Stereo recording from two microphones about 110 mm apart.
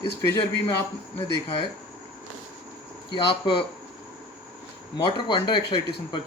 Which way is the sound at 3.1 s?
45° left (ahead or behind).